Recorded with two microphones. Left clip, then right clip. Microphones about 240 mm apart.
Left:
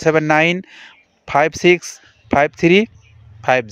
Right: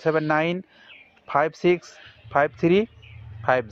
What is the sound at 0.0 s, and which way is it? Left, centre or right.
A man's voice, left.